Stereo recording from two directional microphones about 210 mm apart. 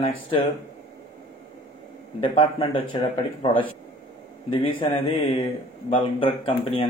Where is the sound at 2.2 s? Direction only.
25° left (ahead or behind).